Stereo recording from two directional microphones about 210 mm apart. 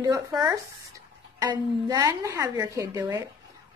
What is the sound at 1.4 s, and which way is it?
Speech, 20° right (ahead or behind).